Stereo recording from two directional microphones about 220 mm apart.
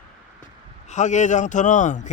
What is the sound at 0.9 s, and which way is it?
A man's voice, 35° left (ahead or behind).